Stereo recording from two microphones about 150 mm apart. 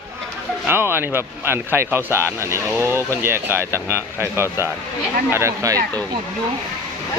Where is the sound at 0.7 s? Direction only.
15° right (ahead or behind).